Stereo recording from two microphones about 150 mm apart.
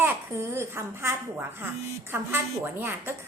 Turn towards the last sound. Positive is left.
turn(degrees=-15)  # may be behind; listen again after turning